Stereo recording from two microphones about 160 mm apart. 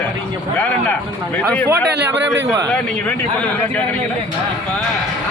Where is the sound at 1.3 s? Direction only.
10° left (ahead or behind).